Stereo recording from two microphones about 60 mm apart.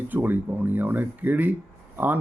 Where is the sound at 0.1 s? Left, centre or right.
Right.